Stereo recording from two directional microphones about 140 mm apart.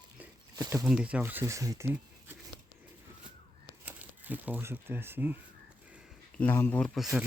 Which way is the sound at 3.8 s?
10° right (ahead or behind).